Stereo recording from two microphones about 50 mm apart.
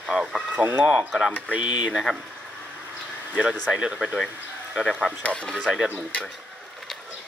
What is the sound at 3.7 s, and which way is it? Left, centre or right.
Speech, centre.